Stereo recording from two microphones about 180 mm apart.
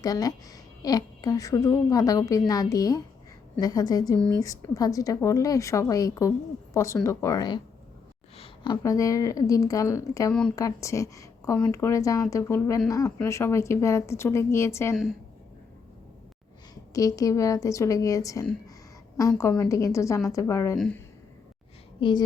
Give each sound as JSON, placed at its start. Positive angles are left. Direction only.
{"t": 0.0, "sound": "a woman's voice", "side_deg": 20}
{"t": 16.9, "sound": "a woman's voice", "side_deg": 20}
{"t": 20.7, "sound": "speech", "side_deg": 5}
{"t": 22.0, "sound": "a woman's voice", "side_deg": 30}